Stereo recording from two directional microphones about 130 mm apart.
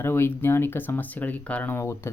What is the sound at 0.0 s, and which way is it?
Speech, 20° left (ahead or behind).